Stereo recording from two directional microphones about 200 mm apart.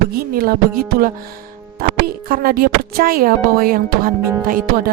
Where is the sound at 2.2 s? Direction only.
45° right (ahead or behind).